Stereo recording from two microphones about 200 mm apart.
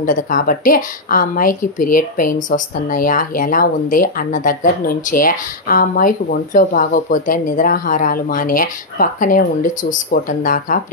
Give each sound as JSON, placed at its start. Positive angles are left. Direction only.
{"t": 0.0, "sound": "speech", "side_deg": 40}